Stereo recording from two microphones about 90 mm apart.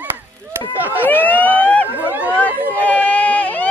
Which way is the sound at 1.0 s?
20° left (ahead or behind).